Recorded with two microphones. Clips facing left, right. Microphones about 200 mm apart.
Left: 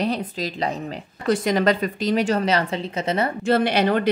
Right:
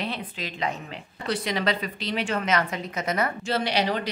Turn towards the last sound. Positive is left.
turn(degrees=55)  # may be behind; listen again after turning